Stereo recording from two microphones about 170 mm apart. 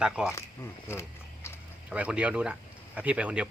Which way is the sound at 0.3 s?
15° left (ahead or behind).